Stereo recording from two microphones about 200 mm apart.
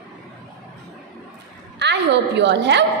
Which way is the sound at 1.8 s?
60° right (ahead or behind).